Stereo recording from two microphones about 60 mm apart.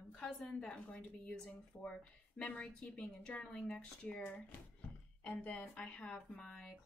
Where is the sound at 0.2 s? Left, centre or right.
Centre.